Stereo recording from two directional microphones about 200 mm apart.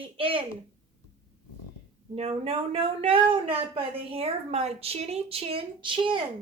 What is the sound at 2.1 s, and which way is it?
A woman's voice, 30° right (ahead or behind).